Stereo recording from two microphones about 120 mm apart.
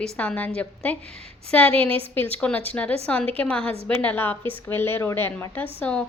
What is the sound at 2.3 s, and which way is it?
A woman's voice, 10° left (ahead or behind).